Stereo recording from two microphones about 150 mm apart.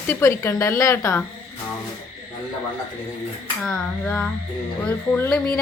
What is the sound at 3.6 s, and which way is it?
Speech, 10° left (ahead or behind).